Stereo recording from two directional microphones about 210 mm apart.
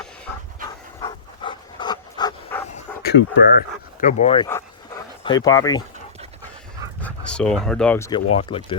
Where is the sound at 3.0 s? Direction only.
55° left (ahead or behind).